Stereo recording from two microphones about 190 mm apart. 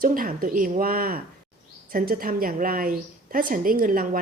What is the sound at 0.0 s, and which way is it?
A woman's voice, 50° right (ahead or behind).